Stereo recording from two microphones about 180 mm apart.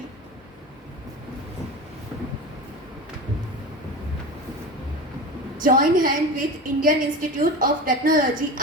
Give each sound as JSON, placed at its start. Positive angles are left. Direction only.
{"t": 5.6, "sound": "a woman's voice", "side_deg": -50}